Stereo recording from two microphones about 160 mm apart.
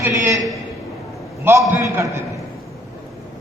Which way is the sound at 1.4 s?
15° right (ahead or behind).